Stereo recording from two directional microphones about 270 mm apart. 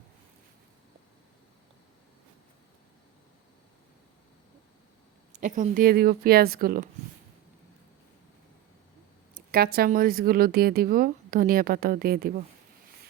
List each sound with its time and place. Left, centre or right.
5.4 s speech: right
9.5 s speech: right